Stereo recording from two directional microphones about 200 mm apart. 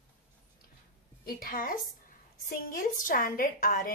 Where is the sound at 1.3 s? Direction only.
45° left (ahead or behind).